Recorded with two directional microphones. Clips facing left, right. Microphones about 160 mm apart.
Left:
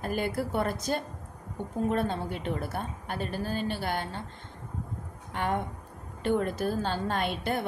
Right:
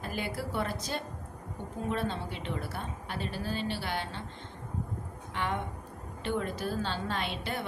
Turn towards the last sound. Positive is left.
turn(degrees=50)  # may be behind; listen again after turning